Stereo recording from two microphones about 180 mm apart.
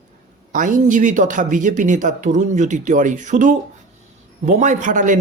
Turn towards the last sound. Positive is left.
turn(degrees=-45)  # may be behind; listen again after turning